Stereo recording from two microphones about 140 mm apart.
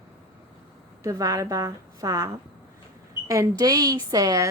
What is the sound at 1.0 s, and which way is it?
A woman's voice, 25° right (ahead or behind).